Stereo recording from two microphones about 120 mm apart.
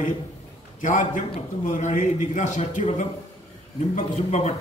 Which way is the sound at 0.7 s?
90° left.